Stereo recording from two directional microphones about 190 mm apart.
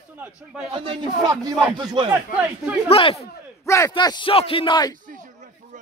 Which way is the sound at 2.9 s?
30° left (ahead or behind).